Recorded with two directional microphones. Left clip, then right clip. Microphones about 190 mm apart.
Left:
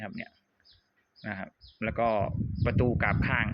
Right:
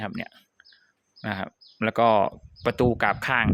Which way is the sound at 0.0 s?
35° right (ahead or behind).